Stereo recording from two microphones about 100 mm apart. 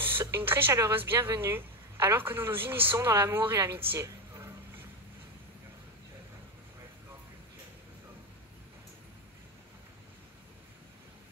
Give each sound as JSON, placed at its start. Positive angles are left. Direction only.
{"t": 0.0, "sound": "speech", "side_deg": -25}